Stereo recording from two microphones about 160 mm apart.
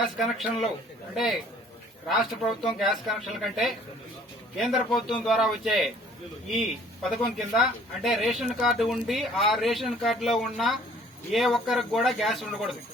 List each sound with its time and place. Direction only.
0.2 s speech: centre (ahead or behind)